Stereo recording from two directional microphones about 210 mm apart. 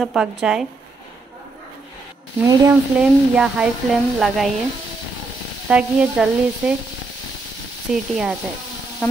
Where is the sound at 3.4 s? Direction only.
Centre (ahead or behind).